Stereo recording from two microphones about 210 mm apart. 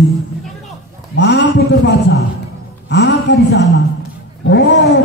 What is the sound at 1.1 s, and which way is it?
A man's voice, 55° left (ahead or behind).